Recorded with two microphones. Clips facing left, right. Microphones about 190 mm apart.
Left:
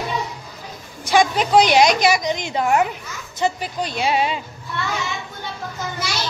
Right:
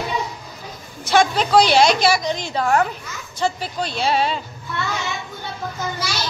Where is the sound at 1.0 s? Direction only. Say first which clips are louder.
Even; 15° left (ahead or behind).